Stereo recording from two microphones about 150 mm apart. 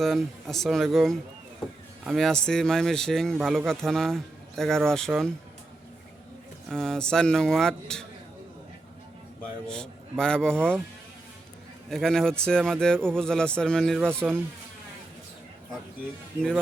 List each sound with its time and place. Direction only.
0.0 s speech: centre (ahead or behind)
6.7 s speech: 5° left (ahead or behind)
9.6 s speech: 5° left (ahead or behind)
11.9 s speech: 5° left (ahead or behind)